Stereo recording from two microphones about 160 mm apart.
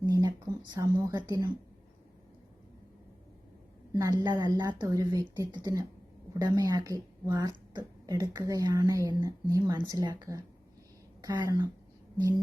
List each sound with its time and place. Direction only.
0.0 s speech: 25° right (ahead or behind)
3.9 s speech: 25° right (ahead or behind)